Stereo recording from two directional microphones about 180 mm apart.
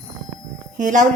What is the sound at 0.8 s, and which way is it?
Speech, 45° right (ahead or behind).